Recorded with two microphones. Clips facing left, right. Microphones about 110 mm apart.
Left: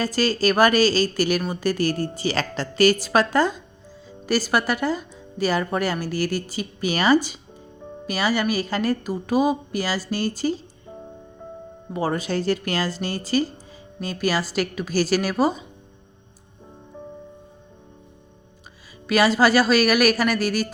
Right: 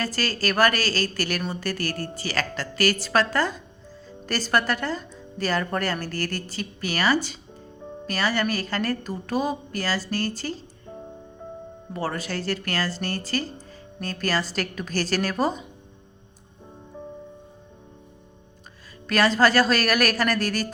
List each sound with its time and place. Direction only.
0.0 s a woman's voice: 15° left (ahead or behind)
11.9 s a woman's voice: 15° left (ahead or behind)
19.0 s a woman's voice: 10° left (ahead or behind)